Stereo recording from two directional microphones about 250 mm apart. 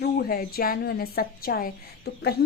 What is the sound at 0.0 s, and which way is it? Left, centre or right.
A woman's voice, left.